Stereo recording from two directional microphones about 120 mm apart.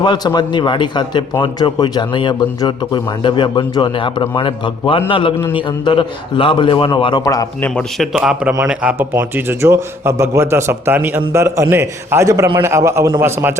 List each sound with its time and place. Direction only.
0.0 s a man's voice: 35° left (ahead or behind)
7.9 s a man's voice: centre (ahead or behind); by 13.5 s 20° right (ahead or behind)